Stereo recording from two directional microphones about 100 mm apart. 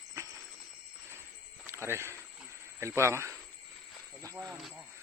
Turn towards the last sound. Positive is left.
turn(degrees=-30)  # may be behind; listen again after turning